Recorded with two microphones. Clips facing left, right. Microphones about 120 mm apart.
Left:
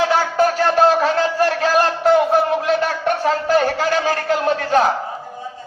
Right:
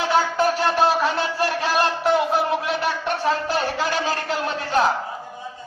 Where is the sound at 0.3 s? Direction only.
45° left (ahead or behind).